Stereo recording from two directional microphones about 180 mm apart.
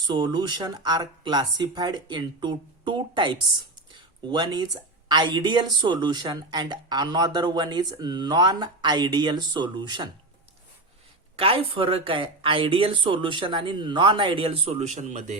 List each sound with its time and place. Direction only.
0.1 s speech: 25° right (ahead or behind)
11.3 s speech: 30° right (ahead or behind)